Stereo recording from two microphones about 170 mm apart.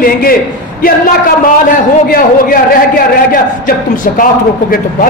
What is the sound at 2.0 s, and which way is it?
A man's voice, 55° left (ahead or behind).